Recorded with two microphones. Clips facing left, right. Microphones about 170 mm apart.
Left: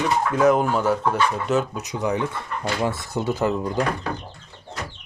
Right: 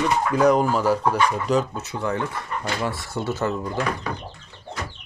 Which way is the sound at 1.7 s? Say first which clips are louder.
Left 2 dB; 15° left (ahead or behind).